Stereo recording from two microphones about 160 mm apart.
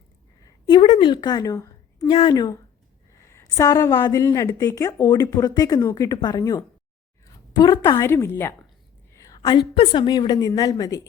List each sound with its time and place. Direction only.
0.8 s a woman's voice: 35° left (ahead or behind)